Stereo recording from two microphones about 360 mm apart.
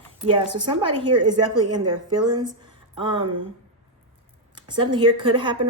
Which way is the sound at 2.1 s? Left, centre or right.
Centre.